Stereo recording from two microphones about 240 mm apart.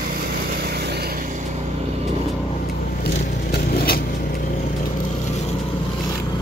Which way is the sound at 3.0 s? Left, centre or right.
Left.